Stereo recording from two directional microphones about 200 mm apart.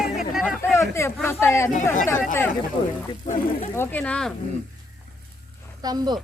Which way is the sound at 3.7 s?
10° left (ahead or behind).